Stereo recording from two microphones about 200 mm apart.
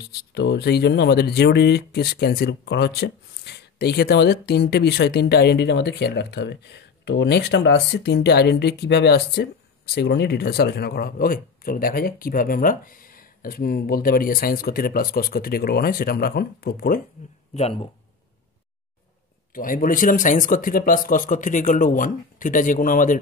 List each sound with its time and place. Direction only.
0.1 s speech: 55° left (ahead or behind)
17.6 s speech: 30° left (ahead or behind)
19.5 s speech: 45° left (ahead or behind)